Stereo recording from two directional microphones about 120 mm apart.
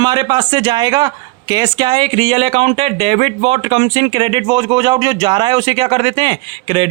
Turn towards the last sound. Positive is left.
turn(degrees=-45)  # may be behind; listen again after turning